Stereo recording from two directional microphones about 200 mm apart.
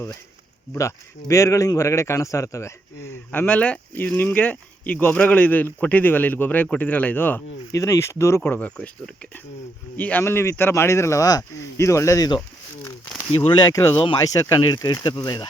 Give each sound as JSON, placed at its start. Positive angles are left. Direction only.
{"t": 0.7, "sound": "a man's voice", "side_deg": 15}
{"t": 10.0, "sound": "a man's voice", "side_deg": 10}
{"t": 13.4, "sound": "speech", "side_deg": 20}